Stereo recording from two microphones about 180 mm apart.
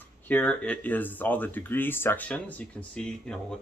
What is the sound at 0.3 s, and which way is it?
Speech, 5° left (ahead or behind).